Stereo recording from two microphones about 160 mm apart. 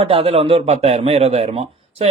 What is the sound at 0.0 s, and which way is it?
Speech, 35° right (ahead or behind).